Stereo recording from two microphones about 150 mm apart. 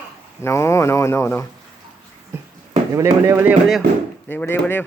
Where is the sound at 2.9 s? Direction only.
20° right (ahead or behind).